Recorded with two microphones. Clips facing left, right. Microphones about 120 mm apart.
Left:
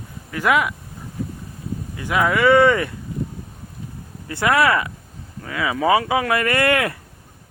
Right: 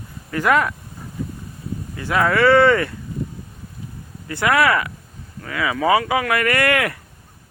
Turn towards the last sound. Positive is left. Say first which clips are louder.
# even
turn(degrees=25)  # may be behind; listen again after turning